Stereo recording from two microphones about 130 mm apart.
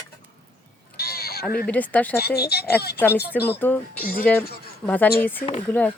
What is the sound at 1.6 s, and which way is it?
Speech, 10° left (ahead or behind).